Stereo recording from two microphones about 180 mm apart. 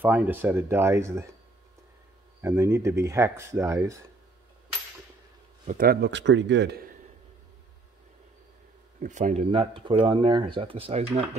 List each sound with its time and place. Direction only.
0.0 s speech: 10° right (ahead or behind)
2.4 s speech: 15° right (ahead or behind)
5.7 s a man's voice: 55° right (ahead or behind)
9.0 s speech: 45° right (ahead or behind)
9.5 s speech: 30° right (ahead or behind)